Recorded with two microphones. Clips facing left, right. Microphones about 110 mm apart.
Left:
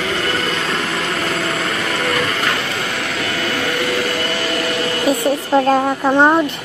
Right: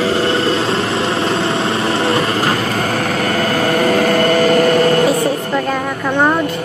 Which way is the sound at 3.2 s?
45° right (ahead or behind).